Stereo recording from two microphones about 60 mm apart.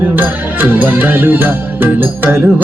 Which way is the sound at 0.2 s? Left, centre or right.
Right.